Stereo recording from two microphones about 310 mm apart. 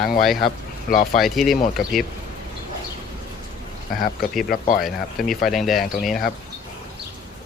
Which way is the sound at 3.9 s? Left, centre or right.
Left.